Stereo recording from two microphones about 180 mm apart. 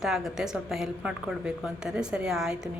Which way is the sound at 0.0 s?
Centre (ahead or behind).